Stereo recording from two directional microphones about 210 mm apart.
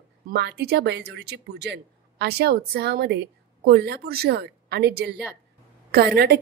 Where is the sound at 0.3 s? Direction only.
50° right (ahead or behind).